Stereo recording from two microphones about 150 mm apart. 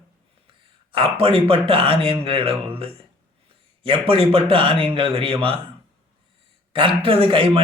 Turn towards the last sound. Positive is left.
turn(degrees=-35)  # may be behind; listen again after turning